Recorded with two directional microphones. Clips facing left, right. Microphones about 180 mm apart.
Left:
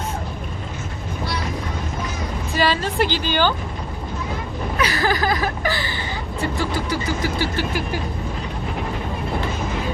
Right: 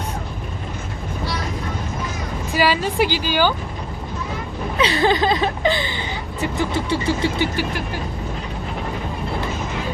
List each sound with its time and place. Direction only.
2.5 s a woman's voice: 10° right (ahead or behind)
4.8 s speech: 25° right (ahead or behind)